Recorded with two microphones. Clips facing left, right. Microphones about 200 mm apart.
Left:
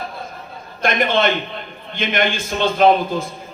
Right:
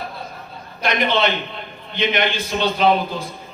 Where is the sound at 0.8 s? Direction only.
50° left (ahead or behind).